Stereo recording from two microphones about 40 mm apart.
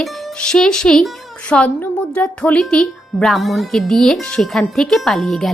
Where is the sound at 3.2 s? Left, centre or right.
Centre.